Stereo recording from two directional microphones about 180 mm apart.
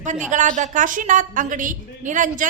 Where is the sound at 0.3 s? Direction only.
45° right (ahead or behind).